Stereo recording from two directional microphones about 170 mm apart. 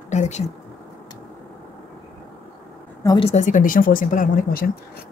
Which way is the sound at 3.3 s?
50° left (ahead or behind).